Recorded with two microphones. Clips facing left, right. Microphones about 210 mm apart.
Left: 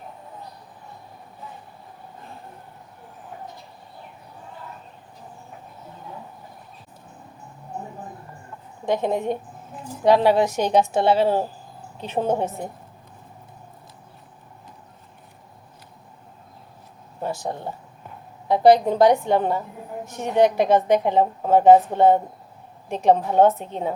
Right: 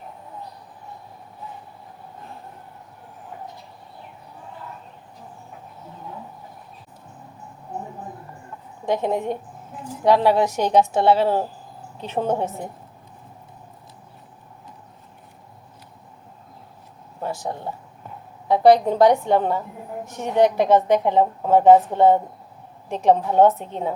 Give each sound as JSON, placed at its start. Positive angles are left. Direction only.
{"t": 9.0, "sound": "a woman's voice", "side_deg": 20}
{"t": 17.2, "sound": "a woman's voice", "side_deg": 20}